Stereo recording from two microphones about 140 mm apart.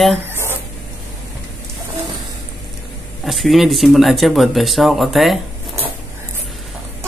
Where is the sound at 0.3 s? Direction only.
15° right (ahead or behind).